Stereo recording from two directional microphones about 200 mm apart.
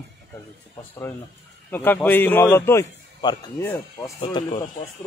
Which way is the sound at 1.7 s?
10° left (ahead or behind).